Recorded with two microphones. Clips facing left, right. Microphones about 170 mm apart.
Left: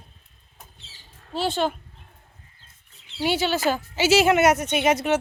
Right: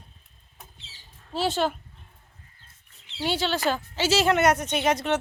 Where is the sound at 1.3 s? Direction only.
5° right (ahead or behind).